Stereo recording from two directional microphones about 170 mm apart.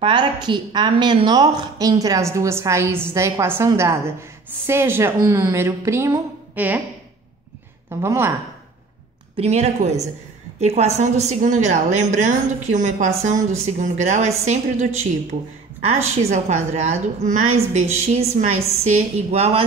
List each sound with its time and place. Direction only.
0.0 s a woman's voice: 25° right (ahead or behind); by 6.8 s 10° right (ahead or behind)
8.0 s a woman's voice: 15° right (ahead or behind)
9.4 s a woman's voice: 40° right (ahead or behind)